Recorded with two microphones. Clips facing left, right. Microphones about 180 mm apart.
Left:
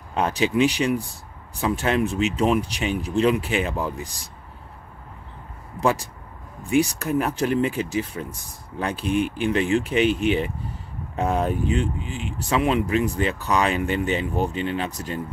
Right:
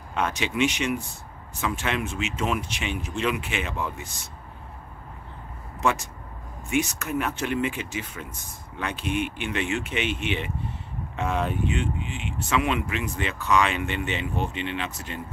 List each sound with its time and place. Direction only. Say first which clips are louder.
0.1 s speech: left 5 dB; 35° left (ahead or behind)
5.8 s speech: left 3 dB; 35° left (ahead or behind)